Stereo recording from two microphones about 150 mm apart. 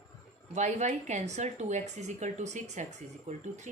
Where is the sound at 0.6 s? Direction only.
50° right (ahead or behind).